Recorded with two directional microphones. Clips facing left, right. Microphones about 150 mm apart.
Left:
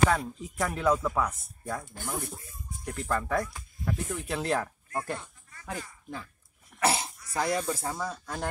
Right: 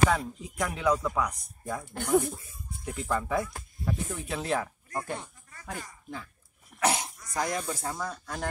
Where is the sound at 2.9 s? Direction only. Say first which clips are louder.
Even; 10° right (ahead or behind).